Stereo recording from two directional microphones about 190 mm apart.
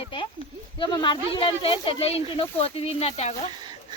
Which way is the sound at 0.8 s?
25° left (ahead or behind).